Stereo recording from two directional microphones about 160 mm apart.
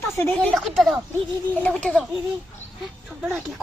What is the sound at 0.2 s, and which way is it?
Speech, 15° left (ahead or behind).